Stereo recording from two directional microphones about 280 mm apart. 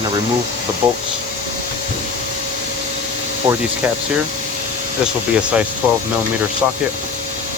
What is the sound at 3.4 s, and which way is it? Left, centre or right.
Speech, centre.